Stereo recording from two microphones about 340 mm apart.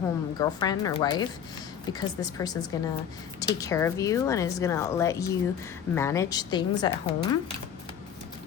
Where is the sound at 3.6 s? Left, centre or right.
Centre.